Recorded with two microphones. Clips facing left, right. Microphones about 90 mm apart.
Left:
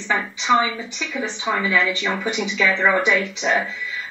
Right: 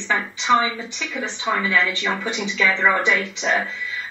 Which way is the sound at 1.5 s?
20° left (ahead or behind).